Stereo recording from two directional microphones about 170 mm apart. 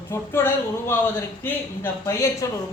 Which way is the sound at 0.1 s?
15° left (ahead or behind).